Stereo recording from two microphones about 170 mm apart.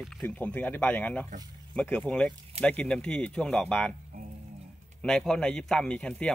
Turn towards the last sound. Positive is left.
turn(degrees=5)  # may be behind; listen again after turning